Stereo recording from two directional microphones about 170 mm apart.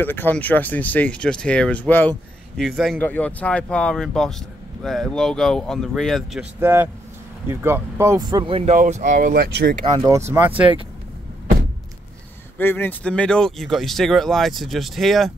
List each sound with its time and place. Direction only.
0.0 s speech: 10° left (ahead or behind)
2.6 s speech: centre (ahead or behind)
6.6 s speech: 15° right (ahead or behind); by 8.7 s 35° right (ahead or behind)
8.7 s speech: 45° right (ahead or behind)
9.2 s speech: 65° right (ahead or behind)
9.9 s speech: 20° right (ahead or behind)
12.5 s speech: 10° left (ahead or behind)